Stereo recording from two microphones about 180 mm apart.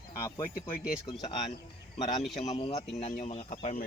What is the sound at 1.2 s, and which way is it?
Speech, 35° left (ahead or behind).